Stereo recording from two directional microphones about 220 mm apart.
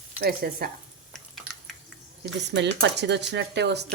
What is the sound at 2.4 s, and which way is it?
Speech, 50° right (ahead or behind).